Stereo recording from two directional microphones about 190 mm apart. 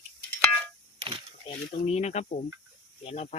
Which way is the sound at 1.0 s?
25° right (ahead or behind).